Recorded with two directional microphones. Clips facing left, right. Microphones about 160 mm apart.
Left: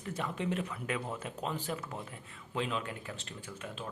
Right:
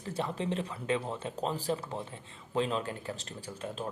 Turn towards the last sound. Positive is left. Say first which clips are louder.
# right 4 dB
turn(degrees=-35)  # may be behind; listen again after turning